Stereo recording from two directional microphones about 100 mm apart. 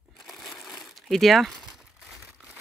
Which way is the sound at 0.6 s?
5° left (ahead or behind).